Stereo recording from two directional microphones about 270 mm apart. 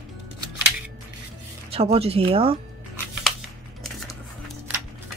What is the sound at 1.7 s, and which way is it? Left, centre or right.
Speech, right.